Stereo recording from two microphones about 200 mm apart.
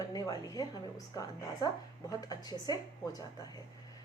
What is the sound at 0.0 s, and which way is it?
Speech, 20° left (ahead or behind).